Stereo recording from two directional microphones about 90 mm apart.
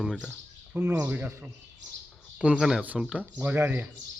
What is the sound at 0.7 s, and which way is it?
A man's voice, 30° right (ahead or behind).